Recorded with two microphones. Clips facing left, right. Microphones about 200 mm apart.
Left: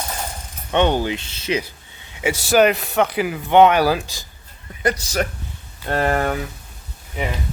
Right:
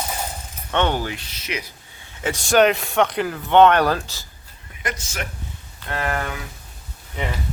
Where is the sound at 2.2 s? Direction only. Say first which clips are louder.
Left 1 dB; 10° left (ahead or behind).